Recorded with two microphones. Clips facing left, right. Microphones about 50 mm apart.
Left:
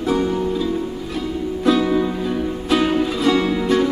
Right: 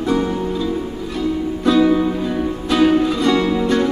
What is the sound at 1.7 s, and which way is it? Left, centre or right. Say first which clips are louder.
Music: right 3 dB; centre.